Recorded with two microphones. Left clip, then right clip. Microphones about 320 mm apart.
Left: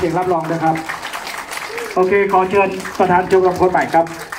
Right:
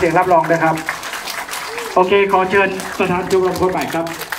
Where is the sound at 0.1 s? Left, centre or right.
Right.